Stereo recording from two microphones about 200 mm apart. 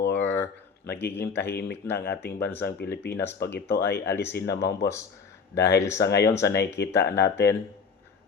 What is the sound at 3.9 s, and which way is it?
Speech, 10° left (ahead or behind).